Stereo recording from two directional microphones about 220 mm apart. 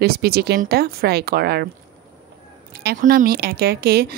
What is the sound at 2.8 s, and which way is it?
Speech, 40° right (ahead or behind).